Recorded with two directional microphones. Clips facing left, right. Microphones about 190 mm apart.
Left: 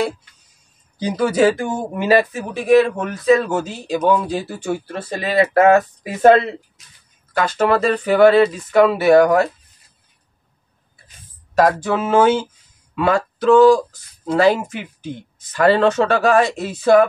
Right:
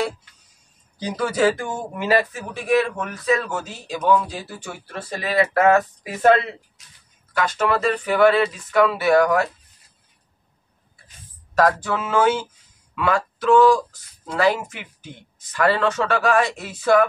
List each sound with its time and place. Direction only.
0.9 s speech: 15° left (ahead or behind)
11.5 s speech: 20° left (ahead or behind)